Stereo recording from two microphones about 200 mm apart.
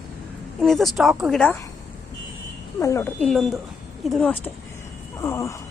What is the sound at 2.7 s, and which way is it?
A woman's voice, 15° left (ahead or behind).